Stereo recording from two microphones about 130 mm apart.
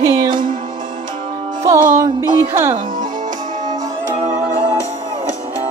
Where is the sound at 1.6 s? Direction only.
30° right (ahead or behind).